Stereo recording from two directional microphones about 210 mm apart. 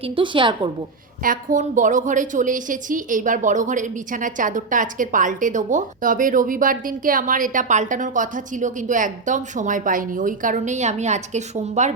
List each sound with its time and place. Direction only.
0.0 s a woman's voice: 25° right (ahead or behind)
1.2 s a woman's voice: 40° right (ahead or behind)